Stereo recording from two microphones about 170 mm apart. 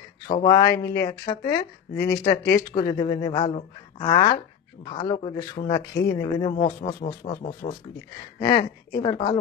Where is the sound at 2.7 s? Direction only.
25° left (ahead or behind).